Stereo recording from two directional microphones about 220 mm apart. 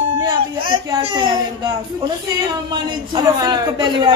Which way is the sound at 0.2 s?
20° right (ahead or behind).